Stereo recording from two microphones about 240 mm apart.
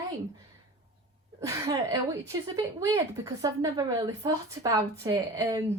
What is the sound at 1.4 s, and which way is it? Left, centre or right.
A woman's voice, centre.